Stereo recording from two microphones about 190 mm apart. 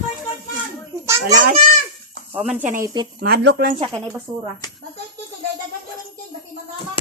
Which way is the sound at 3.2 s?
60° right (ahead or behind).